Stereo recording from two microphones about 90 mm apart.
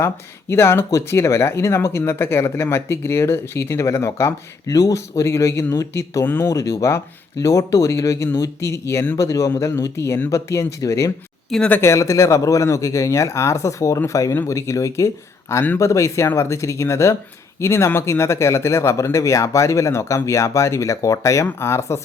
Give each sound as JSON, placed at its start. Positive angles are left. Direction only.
{"t": 0.5, "sound": "speech", "side_deg": 30}